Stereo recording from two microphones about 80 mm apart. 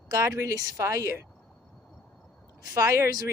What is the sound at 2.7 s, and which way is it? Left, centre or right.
Speech, right.